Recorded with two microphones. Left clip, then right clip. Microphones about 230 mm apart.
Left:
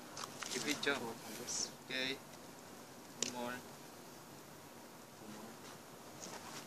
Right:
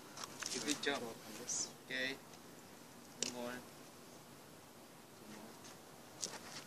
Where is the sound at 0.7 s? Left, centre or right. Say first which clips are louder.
Left 2 dB; left.